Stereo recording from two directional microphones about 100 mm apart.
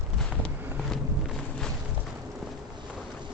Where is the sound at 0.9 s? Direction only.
5° left (ahead or behind).